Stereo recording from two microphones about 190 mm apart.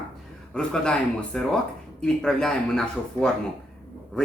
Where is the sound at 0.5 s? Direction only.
5° left (ahead or behind).